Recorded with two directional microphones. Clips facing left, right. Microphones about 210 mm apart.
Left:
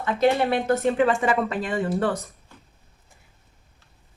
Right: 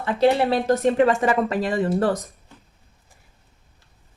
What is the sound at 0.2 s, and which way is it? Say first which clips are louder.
A woman's voice: right 2 dB; 35° right (ahead or behind).